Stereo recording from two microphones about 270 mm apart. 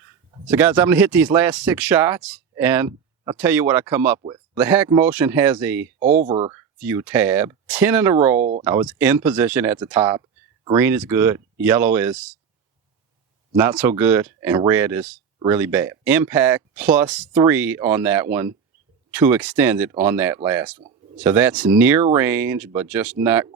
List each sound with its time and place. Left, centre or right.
0.4 s speech: centre
6.2 s speech: centre
8.4 s speech: right
8.6 s speech: centre
13.6 s speech: centre